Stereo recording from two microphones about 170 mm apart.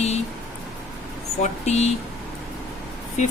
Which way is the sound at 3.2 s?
45° left (ahead or behind).